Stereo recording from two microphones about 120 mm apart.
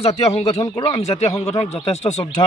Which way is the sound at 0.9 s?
65° left (ahead or behind).